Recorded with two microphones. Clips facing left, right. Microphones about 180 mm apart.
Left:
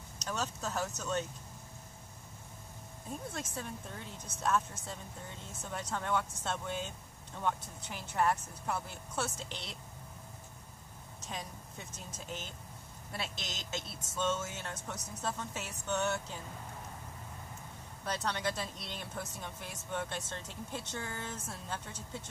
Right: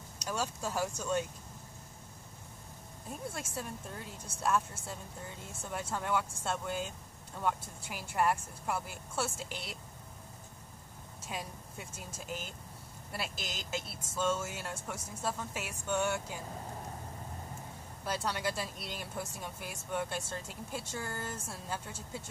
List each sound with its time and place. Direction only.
0.2 s speech: 10° right (ahead or behind)
3.1 s speech: 10° right (ahead or behind)
11.2 s speech: 10° right (ahead or behind)
18.0 s speech: 10° right (ahead or behind)